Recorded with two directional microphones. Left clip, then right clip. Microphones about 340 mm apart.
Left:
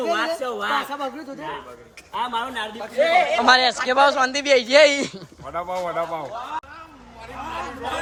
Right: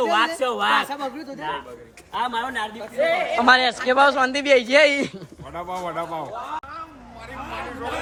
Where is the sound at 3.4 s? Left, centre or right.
Centre.